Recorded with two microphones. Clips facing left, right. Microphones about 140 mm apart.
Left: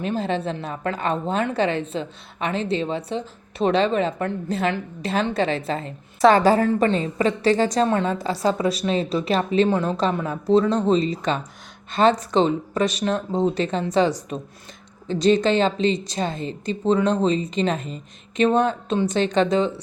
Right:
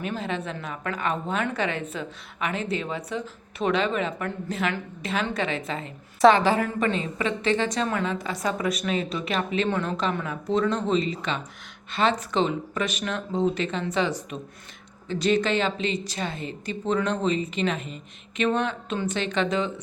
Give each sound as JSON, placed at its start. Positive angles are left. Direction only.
{"t": 0.0, "sound": "a woman's voice", "side_deg": 30}
{"t": 15.0, "sound": "a woman's voice", "side_deg": 30}